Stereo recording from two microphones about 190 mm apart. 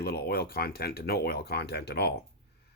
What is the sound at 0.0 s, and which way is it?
Speech, 55° left (ahead or behind).